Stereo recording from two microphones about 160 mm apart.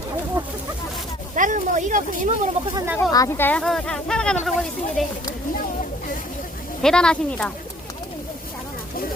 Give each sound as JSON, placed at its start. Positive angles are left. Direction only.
{"t": 1.4, "sound": "speech", "side_deg": -55}
{"t": 2.7, "sound": "speech", "side_deg": -15}
{"t": 3.1, "sound": "speech", "side_deg": 20}
{"t": 6.8, "sound": "speech", "side_deg": 5}